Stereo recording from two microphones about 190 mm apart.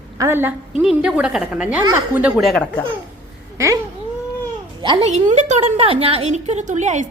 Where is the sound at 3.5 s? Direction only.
15° right (ahead or behind).